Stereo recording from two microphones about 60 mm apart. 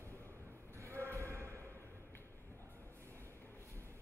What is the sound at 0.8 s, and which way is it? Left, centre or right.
Basketball bounce, right.